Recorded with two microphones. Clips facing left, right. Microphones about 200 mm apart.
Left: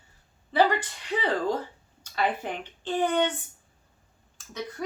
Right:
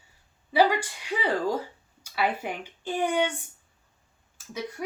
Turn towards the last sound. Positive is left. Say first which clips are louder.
# right 4 dB
turn(degrees=-10)  # may be behind; listen again after turning